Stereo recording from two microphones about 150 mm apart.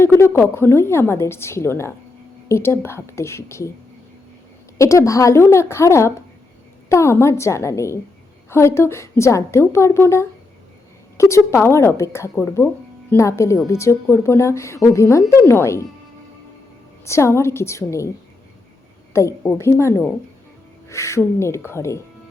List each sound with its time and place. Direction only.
0.0 s a woman's voice: 15° left (ahead or behind)
4.8 s a woman's voice: 20° left (ahead or behind)
17.1 s speech: 20° left (ahead or behind)
19.1 s a woman's voice: 20° left (ahead or behind)